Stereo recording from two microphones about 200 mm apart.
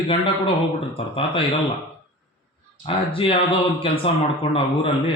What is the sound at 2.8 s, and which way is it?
Speech, 25° left (ahead or behind).